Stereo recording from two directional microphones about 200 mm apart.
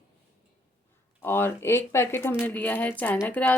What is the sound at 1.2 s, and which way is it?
Speech, 10° left (ahead or behind).